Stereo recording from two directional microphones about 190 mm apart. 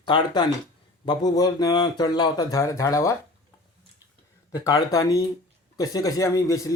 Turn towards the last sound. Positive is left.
turn(degrees=15)  # may be behind; listen again after turning